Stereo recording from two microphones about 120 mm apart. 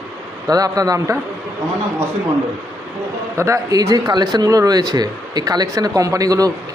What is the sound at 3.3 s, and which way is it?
Speech, 25° right (ahead or behind).